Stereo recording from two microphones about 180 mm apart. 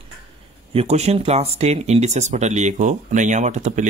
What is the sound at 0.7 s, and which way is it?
Speech, 35° right (ahead or behind).